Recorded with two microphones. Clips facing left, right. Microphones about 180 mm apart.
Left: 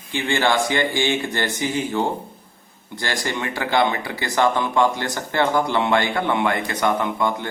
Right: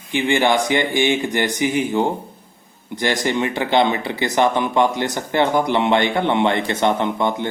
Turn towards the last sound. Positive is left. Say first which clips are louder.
# right 2 dB
turn(degrees=-20)  # may be behind; listen again after turning